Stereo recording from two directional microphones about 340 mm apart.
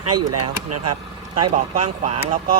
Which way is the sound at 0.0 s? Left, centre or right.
Right.